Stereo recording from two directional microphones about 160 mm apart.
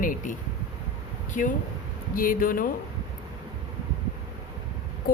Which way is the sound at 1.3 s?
55° left (ahead or behind).